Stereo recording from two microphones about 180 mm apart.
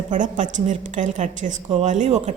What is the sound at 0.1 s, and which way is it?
A woman's voice, 45° right (ahead or behind).